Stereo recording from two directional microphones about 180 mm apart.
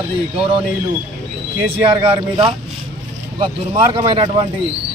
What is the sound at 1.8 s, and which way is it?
Speech, 30° right (ahead or behind).